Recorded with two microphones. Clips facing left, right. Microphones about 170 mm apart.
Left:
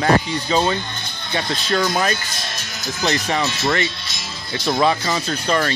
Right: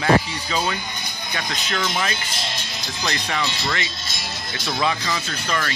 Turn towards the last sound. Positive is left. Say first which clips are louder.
# left 6 dB
turn(degrees=35)  # may be behind; listen again after turning